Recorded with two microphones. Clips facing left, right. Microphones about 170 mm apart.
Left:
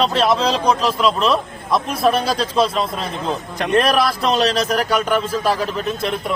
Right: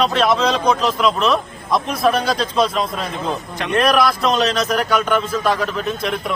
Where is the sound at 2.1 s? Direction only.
30° left (ahead or behind).